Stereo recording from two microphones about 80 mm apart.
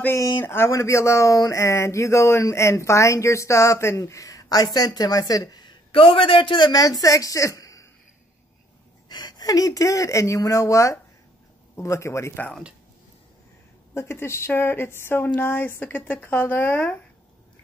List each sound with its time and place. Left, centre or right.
0.4 s speech: left
6.7 s speech: left
9.1 s speech: left
13.9 s speech: left